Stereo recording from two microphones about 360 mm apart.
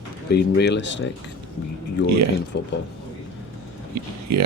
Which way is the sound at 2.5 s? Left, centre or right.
Left.